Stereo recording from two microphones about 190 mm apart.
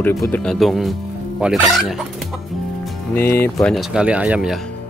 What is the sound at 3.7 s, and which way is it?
Speech, 5° right (ahead or behind).